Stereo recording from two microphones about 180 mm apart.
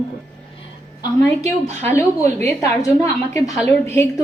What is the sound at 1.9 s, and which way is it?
A woman's voice, 15° left (ahead or behind).